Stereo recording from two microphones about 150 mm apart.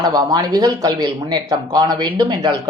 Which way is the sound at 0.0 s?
25° right (ahead or behind).